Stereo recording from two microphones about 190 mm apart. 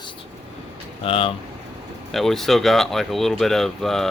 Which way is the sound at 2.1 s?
Centre (ahead or behind).